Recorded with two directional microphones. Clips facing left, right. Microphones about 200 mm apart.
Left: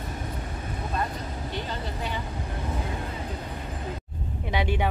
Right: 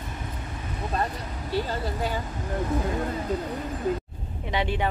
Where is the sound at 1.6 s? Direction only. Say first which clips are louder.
Right 4 dB; 40° right (ahead or behind).